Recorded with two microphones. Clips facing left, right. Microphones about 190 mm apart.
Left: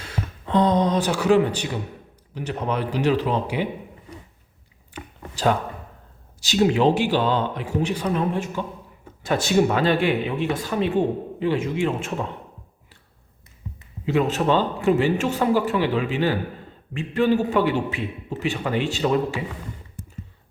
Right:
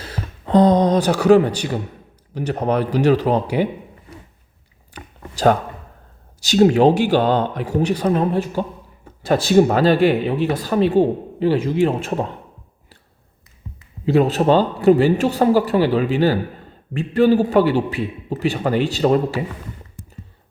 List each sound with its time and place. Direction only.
0.0 s speech: 35° right (ahead or behind)
4.9 s a sound: 40° right (ahead or behind)
6.4 s speech: 40° right (ahead or behind)
14.0 s speech: 35° right (ahead or behind)